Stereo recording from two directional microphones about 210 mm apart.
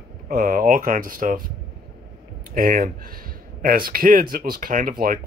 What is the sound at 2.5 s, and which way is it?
Speech, 45° right (ahead or behind).